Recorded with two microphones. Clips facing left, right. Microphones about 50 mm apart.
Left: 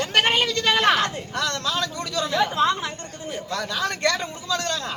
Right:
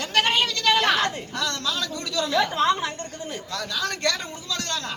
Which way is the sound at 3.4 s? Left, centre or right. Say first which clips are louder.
Left 3 dB; left.